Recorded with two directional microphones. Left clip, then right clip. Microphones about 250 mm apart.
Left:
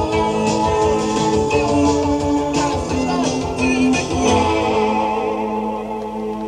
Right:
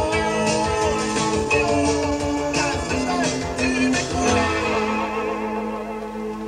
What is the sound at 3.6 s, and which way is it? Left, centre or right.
Music, right.